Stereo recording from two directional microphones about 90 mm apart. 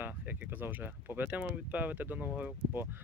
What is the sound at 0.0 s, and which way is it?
Speech, 20° right (ahead or behind).